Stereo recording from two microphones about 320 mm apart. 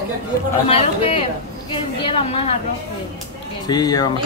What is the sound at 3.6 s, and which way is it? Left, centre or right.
Speech, centre.